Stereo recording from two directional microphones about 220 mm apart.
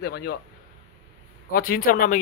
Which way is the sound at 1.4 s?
40° left (ahead or behind).